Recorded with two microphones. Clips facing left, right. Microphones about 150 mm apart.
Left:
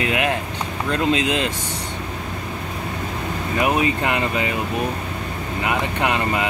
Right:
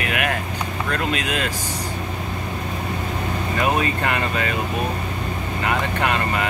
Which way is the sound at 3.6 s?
15° left (ahead or behind).